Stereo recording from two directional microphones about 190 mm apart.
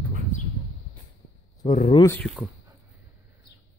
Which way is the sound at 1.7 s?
40° left (ahead or behind).